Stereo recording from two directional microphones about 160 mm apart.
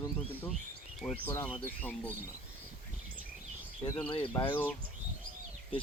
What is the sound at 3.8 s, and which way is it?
Speech, 30° left (ahead or behind).